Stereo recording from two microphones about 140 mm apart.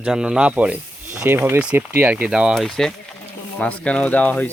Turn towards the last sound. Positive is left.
turn(degrees=10)  # may be behind; listen again after turning